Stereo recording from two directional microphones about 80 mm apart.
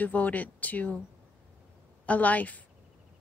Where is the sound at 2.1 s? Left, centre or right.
Centre.